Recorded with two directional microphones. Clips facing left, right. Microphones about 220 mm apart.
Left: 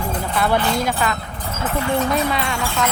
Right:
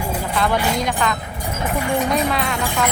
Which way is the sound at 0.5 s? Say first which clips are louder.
Left 1 dB; 10° right (ahead or behind).